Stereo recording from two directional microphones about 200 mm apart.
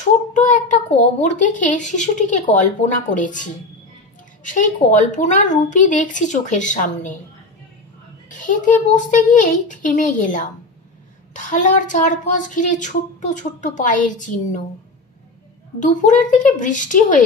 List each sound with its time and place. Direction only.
0.0 s a child's voice: 35° left (ahead or behind)
8.3 s a child's voice: 40° left (ahead or behind)
15.8 s a child's voice: 40° left (ahead or behind)